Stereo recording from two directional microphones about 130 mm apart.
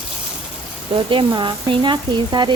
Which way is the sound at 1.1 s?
40° right (ahead or behind).